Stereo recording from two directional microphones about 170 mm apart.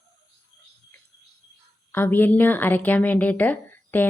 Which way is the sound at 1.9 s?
10° left (ahead or behind).